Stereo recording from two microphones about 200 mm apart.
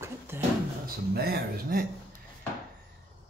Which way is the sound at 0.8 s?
50° right (ahead or behind).